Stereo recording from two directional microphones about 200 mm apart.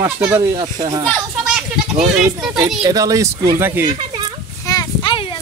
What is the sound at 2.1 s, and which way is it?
Speech, 5° right (ahead or behind).